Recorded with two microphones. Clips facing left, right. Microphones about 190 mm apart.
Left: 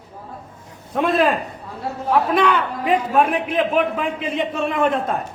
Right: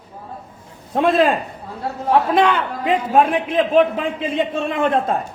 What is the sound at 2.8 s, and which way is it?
A man's voice, 30° right (ahead or behind).